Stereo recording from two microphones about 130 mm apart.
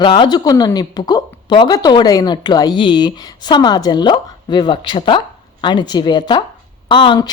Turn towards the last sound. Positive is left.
turn(degrees=35)  # may be behind; listen again after turning